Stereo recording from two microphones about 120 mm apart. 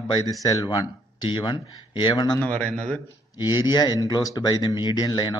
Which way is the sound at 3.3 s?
35° left (ahead or behind).